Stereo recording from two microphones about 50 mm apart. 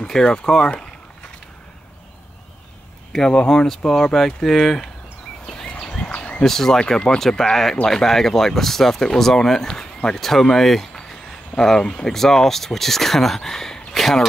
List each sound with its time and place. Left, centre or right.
0.0 s speech: centre
3.1 s speech: centre
5.5 s a sound: centre
6.1 s a sound: left
6.4 s speech: centre
6.8 s speech: centre
7.2 s speech: centre